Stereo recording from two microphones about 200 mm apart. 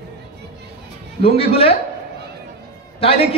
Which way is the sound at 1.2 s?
30° left (ahead or behind).